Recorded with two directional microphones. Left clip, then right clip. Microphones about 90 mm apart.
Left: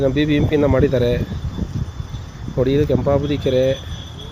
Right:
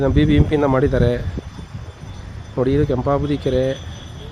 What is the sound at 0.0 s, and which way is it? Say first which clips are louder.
Speech: even; 30° right (ahead or behind).